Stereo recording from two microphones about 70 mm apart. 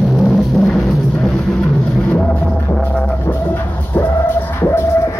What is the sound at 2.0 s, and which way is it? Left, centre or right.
Music, centre.